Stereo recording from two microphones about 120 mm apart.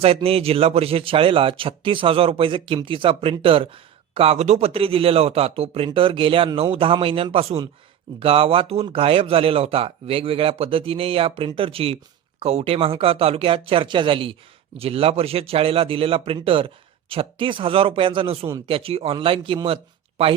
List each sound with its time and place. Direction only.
0.0 s speech: 55° right (ahead or behind)